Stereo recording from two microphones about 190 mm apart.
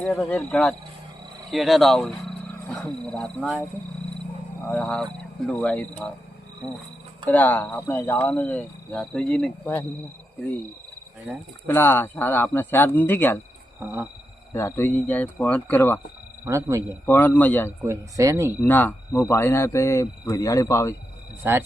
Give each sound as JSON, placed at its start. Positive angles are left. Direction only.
{"t": 0.0, "sound": "speech", "side_deg": 0}
{"t": 4.7, "sound": "speech", "side_deg": 5}
{"t": 7.3, "sound": "speech", "side_deg": 10}
{"t": 11.6, "sound": "speech", "side_deg": 10}
{"t": 13.7, "sound": "speech", "side_deg": -10}
{"t": 14.5, "sound": "speech", "side_deg": 10}
{"t": 16.4, "sound": "speech", "side_deg": -15}
{"t": 16.9, "sound": "speech", "side_deg": 10}
{"t": 17.8, "sound": "speech", "side_deg": -15}
{"t": 18.6, "sound": "speech", "side_deg": 10}
{"t": 21.4, "sound": "speech", "side_deg": -10}